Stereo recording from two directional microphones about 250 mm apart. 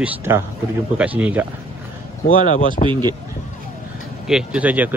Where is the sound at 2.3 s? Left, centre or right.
Left.